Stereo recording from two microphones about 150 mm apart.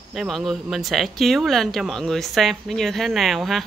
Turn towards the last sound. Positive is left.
turn(degrees=0)  # may be behind; listen again after turning